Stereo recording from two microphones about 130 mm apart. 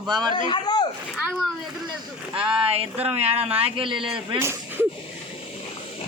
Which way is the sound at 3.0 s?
50° right (ahead or behind).